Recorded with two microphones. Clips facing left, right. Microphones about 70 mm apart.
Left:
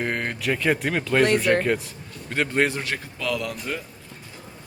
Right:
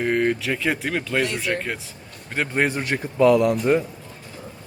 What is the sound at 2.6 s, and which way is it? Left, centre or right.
A man's voice, right.